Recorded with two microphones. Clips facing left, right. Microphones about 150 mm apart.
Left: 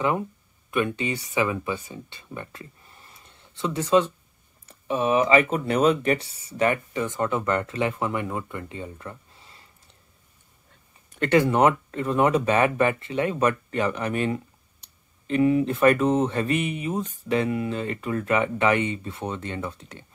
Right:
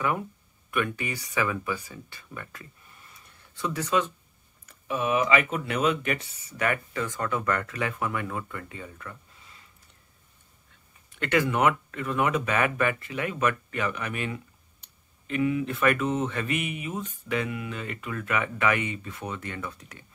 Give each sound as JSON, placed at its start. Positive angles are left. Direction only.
{"t": 0.7, "sound": "speech", "side_deg": 25}
{"t": 11.1, "sound": "speech", "side_deg": 35}